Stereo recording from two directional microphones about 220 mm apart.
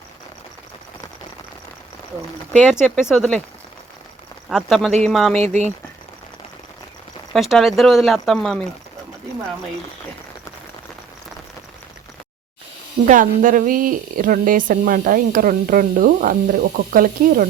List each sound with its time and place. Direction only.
2.5 s speech: centre (ahead or behind)
4.4 s speech: centre (ahead or behind)
5.4 s speech: 30° right (ahead or behind)
7.3 s speech: centre (ahead or behind)
13.1 s speech: 35° right (ahead or behind)